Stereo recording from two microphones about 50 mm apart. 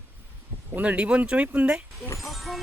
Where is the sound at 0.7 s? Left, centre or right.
Right.